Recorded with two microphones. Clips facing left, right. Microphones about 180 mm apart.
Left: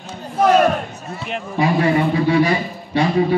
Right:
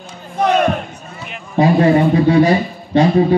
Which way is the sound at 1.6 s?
40° right (ahead or behind).